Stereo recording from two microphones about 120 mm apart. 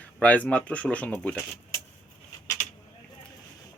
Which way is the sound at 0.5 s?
10° left (ahead or behind).